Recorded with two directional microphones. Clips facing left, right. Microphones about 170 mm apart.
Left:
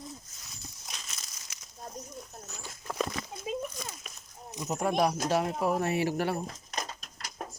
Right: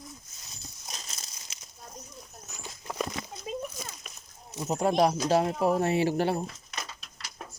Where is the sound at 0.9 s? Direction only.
35° right (ahead or behind).